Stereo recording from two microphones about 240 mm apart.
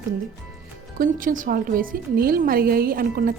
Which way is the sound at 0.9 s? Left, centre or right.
Right.